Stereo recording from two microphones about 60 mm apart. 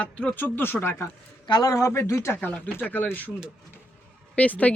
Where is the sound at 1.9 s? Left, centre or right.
Left.